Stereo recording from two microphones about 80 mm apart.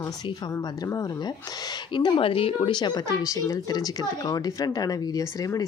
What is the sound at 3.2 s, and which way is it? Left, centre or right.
A woman's voice, left.